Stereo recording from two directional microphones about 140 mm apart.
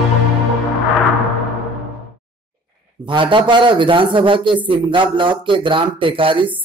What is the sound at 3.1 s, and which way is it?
Speech, 35° right (ahead or behind).